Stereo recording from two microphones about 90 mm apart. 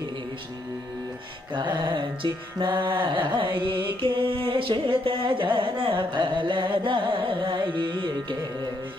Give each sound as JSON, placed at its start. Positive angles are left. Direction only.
{"t": 1.5, "sound": "music", "side_deg": -60}